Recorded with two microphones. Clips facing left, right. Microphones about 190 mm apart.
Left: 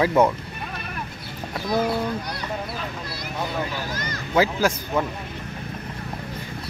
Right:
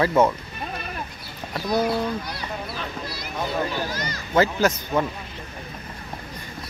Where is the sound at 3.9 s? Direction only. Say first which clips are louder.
Even; 50° left (ahead or behind).